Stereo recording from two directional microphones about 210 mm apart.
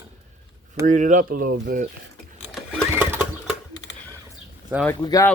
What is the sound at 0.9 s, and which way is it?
Speech, 40° right (ahead or behind).